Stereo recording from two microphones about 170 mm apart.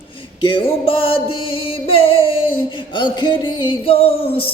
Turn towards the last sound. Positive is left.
turn(degrees=35)  # may be behind; listen again after turning